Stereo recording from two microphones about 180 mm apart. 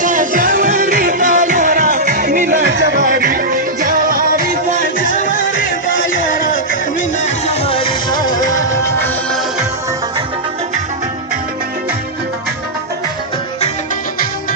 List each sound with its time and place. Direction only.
0.0 s music: 45° right (ahead or behind)
7.3 s music: 35° left (ahead or behind); by 8.6 s 20° left (ahead or behind)
9.0 s music: centre (ahead or behind)